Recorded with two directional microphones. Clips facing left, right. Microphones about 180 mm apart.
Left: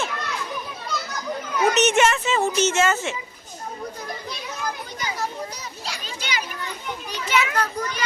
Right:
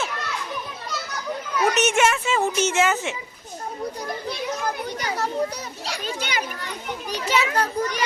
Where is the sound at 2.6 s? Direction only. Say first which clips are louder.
Left 1 dB; 15° right (ahead or behind).